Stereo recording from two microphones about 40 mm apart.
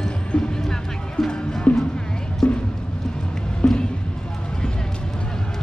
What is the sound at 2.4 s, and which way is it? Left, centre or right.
Music, centre.